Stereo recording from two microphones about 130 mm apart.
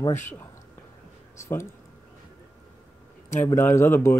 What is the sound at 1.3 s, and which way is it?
Speech, 20° left (ahead or behind).